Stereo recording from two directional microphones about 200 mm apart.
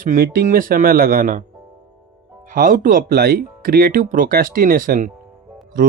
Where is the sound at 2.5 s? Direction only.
45° right (ahead or behind).